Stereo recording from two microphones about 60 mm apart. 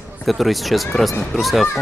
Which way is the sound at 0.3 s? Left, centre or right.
Centre.